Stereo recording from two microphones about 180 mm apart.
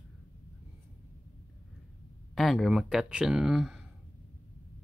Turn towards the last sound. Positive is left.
turn(degrees=0)  # may be behind; listen again after turning